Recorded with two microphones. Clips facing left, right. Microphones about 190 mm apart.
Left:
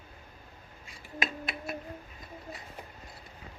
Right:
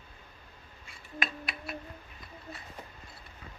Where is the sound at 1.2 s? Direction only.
25° left (ahead or behind).